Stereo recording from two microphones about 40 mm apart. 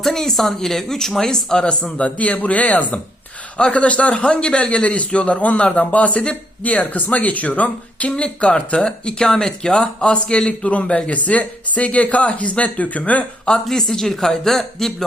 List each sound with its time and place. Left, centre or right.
0.0 s speech: centre
1.8 s a man's voice: left
4.2 s a man's voice: left
8.8 s speech: centre
11.1 s a man's voice: left
13.7 s speech: centre